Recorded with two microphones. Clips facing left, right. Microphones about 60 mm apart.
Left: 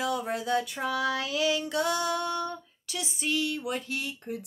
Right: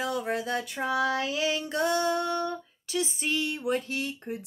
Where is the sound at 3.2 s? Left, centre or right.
Right.